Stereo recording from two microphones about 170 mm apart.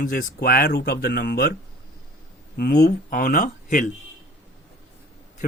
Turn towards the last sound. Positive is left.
turn(degrees=55)  # may be behind; listen again after turning